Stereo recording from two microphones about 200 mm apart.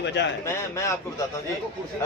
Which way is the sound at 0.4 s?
15° left (ahead or behind).